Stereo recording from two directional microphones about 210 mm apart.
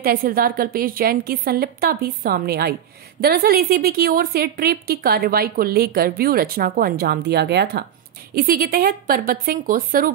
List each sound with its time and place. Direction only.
0.0 s a woman's voice: 45° right (ahead or behind)